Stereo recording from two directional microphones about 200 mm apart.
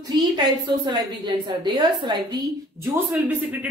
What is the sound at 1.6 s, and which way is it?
Speech, 20° right (ahead or behind).